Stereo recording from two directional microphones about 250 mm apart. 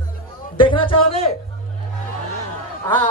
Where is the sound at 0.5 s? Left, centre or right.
Left.